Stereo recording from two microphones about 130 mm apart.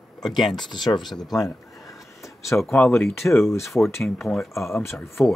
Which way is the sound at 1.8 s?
25° left (ahead or behind).